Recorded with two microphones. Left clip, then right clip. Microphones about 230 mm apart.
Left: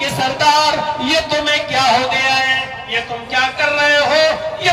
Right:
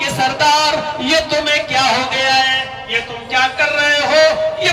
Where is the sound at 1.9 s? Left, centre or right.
Right.